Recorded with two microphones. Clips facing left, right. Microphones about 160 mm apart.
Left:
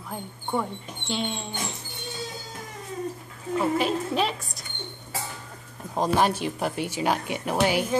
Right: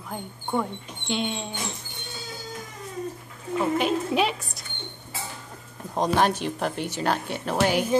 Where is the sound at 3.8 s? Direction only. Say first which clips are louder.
Right 2 dB; centre (ahead or behind).